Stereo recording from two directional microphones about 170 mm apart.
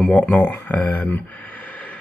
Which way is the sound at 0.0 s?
10° left (ahead or behind).